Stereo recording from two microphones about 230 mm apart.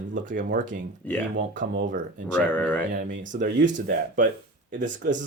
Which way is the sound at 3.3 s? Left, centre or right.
Right.